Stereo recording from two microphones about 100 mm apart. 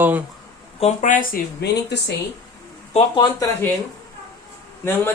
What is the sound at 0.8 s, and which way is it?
Speech, 90° left.